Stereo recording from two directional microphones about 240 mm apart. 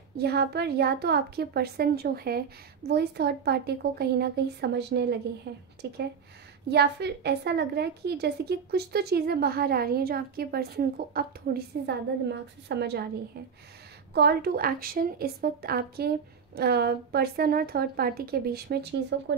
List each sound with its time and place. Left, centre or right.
0.2 s a woman's voice: right
14.1 s a woman's voice: right